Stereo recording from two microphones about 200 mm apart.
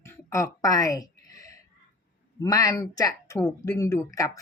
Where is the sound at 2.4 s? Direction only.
20° left (ahead or behind).